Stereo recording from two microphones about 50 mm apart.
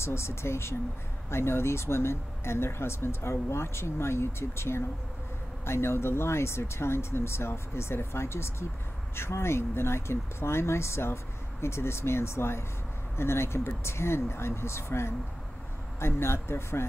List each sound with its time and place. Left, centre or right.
0.0 s speech: left